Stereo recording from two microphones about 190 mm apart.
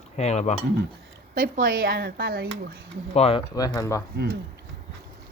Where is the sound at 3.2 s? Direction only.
30° left (ahead or behind).